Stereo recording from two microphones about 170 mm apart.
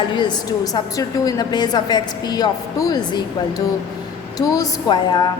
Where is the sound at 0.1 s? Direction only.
25° left (ahead or behind).